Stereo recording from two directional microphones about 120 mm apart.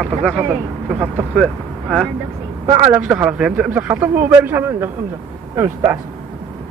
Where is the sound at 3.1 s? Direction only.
10° right (ahead or behind); by 5.9 s 25° right (ahead or behind).